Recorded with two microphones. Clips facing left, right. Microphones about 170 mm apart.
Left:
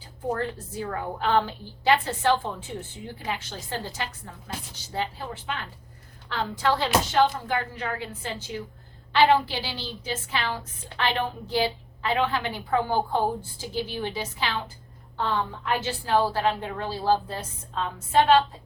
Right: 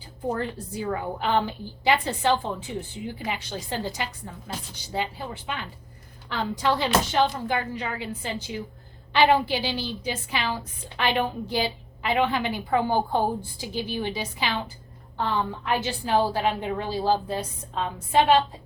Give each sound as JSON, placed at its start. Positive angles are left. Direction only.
{"t": 0.3, "sound": "a woman's voice", "side_deg": -15}
{"t": 15.6, "sound": "a woman's voice", "side_deg": -15}